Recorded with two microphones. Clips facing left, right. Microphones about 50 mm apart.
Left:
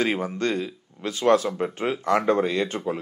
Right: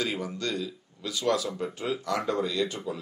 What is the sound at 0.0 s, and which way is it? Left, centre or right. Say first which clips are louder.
Speech: left 7 dB; left.